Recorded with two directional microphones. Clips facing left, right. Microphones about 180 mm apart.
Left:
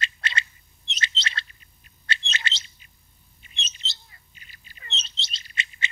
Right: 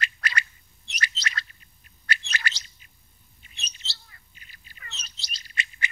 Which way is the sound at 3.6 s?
20° left (ahead or behind).